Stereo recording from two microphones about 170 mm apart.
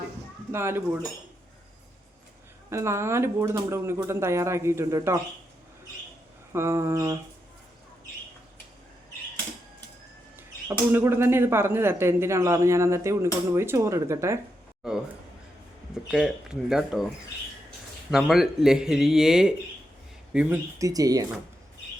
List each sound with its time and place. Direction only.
0.5 s speech: 15° right (ahead or behind)
2.6 s speech: 15° right (ahead or behind)
6.5 s speech: 15° right (ahead or behind)
10.3 s speech: 15° right (ahead or behind)
14.8 s speech: 5° right (ahead or behind)
16.0 s speech: 5° right (ahead or behind)
18.1 s speech: centre (ahead or behind)
20.7 s speech: 20° right (ahead or behind)